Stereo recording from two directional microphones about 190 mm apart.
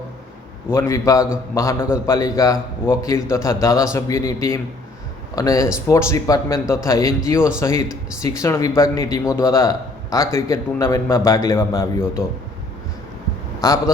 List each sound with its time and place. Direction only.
0.7 s a man's voice: 15° left (ahead or behind)
13.6 s a man's voice: 15° left (ahead or behind)